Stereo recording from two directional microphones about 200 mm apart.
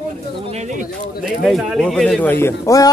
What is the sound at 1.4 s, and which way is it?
Speech, centre (ahead or behind).